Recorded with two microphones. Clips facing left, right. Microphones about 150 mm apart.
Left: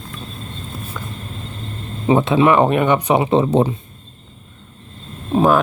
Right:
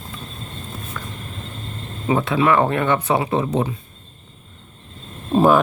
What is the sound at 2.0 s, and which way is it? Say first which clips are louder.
Speech: left 4 dB; 25° left (ahead or behind).